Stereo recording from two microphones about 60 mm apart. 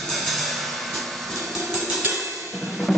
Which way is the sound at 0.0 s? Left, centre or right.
Centre.